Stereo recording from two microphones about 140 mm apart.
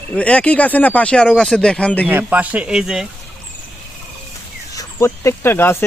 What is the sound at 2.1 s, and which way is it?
Speech, 10° right (ahead or behind).